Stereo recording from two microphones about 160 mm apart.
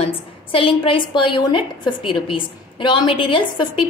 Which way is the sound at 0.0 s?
35° left (ahead or behind).